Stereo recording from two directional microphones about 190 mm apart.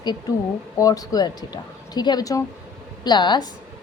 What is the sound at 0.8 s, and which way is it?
A woman's voice, 20° left (ahead or behind).